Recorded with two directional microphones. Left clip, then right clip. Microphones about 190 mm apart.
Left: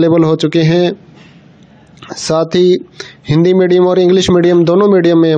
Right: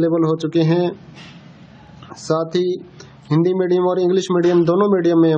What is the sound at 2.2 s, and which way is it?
A man's voice, 40° left (ahead or behind).